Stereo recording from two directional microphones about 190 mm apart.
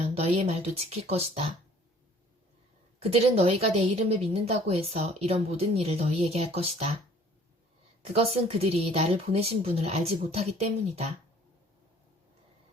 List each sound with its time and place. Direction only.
0.1 s speech: 30° right (ahead or behind)
3.0 s a woman's voice: 30° right (ahead or behind)
8.0 s a woman's voice: 30° right (ahead or behind)